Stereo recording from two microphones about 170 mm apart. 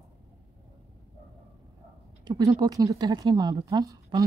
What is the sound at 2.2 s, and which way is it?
Speech, 25° right (ahead or behind).